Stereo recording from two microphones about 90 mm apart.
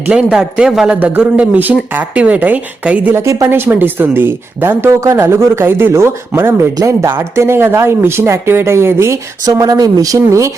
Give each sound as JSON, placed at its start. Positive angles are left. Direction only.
{"t": 0.1, "sound": "a man's voice", "side_deg": -5}
{"t": 3.2, "sound": "speech", "side_deg": -30}